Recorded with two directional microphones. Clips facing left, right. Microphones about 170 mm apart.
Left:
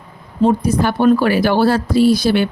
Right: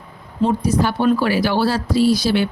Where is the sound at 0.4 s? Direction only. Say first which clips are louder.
Left 3 dB; 55° left (ahead or behind).